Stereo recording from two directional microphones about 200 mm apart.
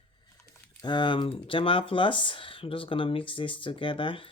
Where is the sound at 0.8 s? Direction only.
25° left (ahead or behind).